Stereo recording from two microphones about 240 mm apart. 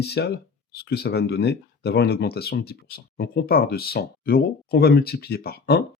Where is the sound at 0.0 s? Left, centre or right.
Left.